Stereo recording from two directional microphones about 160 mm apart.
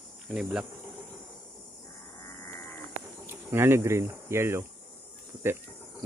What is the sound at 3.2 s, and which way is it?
Speech, 15° right (ahead or behind).